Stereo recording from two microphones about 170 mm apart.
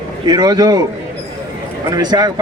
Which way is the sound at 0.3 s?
25° right (ahead or behind).